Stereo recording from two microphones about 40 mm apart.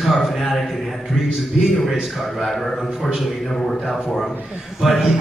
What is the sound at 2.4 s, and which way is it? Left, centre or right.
Speech, centre.